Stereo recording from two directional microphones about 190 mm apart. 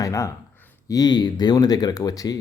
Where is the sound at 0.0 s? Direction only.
15° left (ahead or behind).